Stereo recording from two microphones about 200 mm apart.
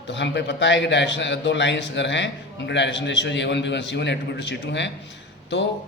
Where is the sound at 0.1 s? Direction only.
65° left (ahead or behind).